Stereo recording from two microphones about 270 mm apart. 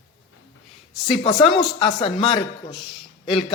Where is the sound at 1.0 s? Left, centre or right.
Centre.